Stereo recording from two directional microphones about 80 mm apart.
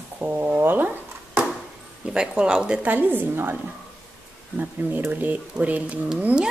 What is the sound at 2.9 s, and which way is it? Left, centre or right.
Speech, right.